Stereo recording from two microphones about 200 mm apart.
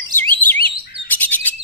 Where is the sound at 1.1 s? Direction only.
10° left (ahead or behind).